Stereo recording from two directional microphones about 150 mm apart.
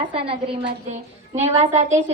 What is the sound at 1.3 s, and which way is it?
Speech, 50° right (ahead or behind).